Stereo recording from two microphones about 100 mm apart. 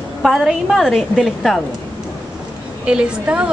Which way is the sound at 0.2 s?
Centre (ahead or behind).